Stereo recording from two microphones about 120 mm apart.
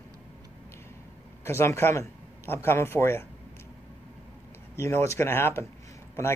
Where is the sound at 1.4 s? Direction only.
20° left (ahead or behind).